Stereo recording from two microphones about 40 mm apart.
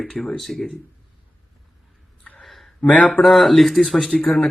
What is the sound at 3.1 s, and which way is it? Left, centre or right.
Speech, centre.